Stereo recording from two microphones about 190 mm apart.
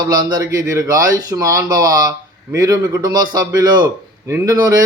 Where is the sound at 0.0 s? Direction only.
20° right (ahead or behind).